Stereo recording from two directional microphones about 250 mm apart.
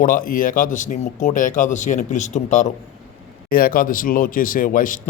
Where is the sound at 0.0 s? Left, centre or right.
Left.